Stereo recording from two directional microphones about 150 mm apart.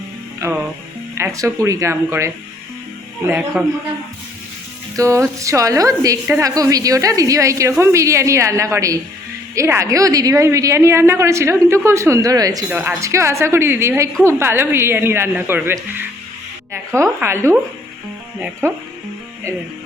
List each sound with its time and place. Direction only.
0.3 s a woman's voice: 15° right (ahead or behind)
3.6 s speech: 5° right (ahead or behind)
4.9 s a woman's voice: 20° right (ahead or behind)
12.7 s speech: 10° right (ahead or behind)